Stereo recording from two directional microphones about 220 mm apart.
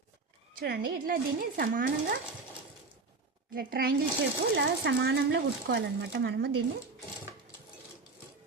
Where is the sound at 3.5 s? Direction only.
40° right (ahead or behind).